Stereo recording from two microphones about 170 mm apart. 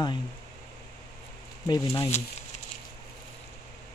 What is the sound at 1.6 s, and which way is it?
Speech, 20° left (ahead or behind).